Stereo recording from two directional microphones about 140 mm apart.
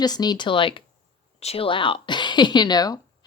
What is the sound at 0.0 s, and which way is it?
A woman's voice, 30° left (ahead or behind).